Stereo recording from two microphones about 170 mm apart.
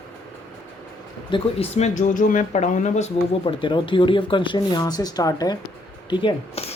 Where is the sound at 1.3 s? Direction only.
35° left (ahead or behind).